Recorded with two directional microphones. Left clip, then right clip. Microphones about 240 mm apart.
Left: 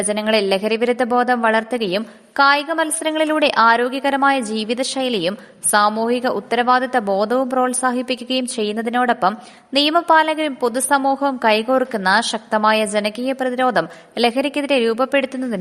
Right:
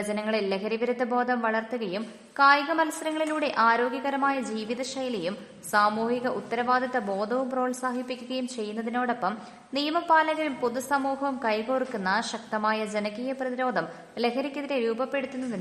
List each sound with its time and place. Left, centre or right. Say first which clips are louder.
0.1 s a woman's voice: left 11 dB; left